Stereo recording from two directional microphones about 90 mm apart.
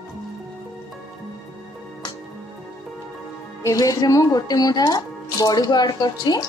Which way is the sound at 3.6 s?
35° left (ahead or behind).